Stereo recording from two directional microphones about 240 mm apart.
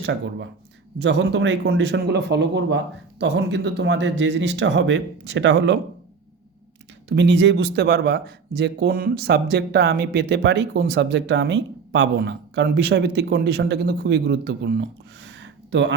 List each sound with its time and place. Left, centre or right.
0.0 s speech: right
7.2 s speech: right